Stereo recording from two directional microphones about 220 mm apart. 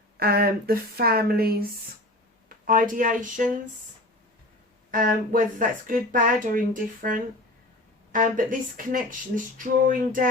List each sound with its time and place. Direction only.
0.2 s speech: 45° right (ahead or behind)
2.6 s speech: 40° right (ahead or behind)
4.9 s speech: 40° right (ahead or behind)